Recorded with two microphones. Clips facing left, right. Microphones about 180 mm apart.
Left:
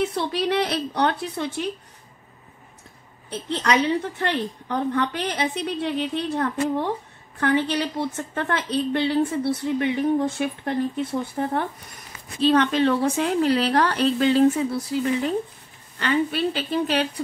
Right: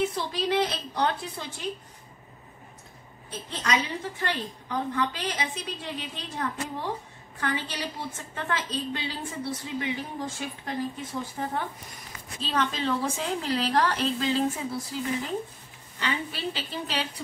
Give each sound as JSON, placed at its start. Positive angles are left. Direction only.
{"t": 0.1, "sound": "a woman's voice", "side_deg": 65}
{"t": 3.3, "sound": "a woman's voice", "side_deg": 65}